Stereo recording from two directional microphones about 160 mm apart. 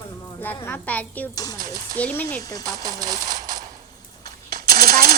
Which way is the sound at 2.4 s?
20° left (ahead or behind).